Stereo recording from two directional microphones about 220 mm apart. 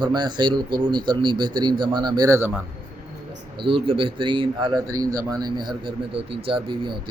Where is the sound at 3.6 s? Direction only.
25° right (ahead or behind).